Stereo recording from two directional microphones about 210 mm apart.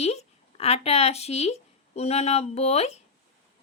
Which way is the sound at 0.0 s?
30° left (ahead or behind).